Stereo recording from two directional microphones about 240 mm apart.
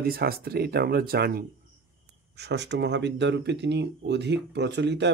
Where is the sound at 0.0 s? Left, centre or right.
Right.